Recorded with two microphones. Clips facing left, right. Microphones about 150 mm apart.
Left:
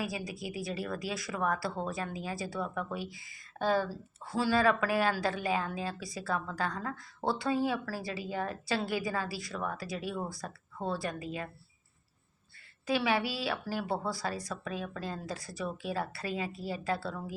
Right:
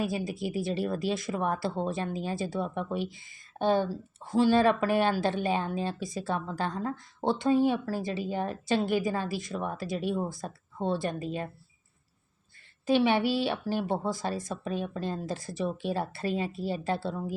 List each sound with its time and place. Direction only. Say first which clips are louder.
0.0 s speech: right 6 dB; 25° right (ahead or behind)
12.8 s speech: right 6 dB; 25° right (ahead or behind)